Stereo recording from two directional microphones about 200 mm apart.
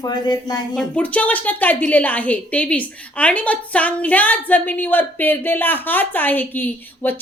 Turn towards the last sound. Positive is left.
turn(degrees=10)  # may be behind; listen again after turning